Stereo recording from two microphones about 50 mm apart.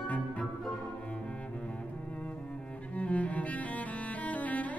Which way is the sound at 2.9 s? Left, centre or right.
Left.